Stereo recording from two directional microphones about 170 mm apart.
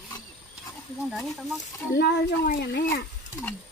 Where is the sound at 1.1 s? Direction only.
Centre (ahead or behind).